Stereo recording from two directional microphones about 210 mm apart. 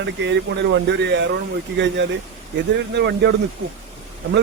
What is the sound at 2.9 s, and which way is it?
Speech, 55° right (ahead or behind).